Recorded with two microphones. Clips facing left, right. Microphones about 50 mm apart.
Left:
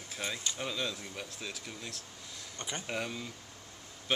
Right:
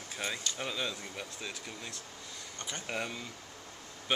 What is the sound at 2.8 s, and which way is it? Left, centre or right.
Speech, centre.